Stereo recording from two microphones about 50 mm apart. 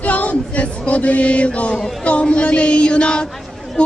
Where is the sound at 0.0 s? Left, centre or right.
Left.